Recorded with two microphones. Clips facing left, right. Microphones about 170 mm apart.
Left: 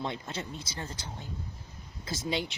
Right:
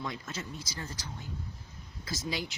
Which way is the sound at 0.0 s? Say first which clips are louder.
Left 3 dB; 30° left (ahead or behind).